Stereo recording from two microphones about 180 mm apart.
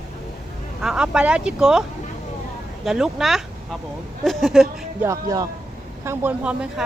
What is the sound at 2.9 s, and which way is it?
Speech, centre (ahead or behind).